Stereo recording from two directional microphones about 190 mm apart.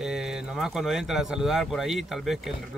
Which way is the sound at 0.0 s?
5° right (ahead or behind).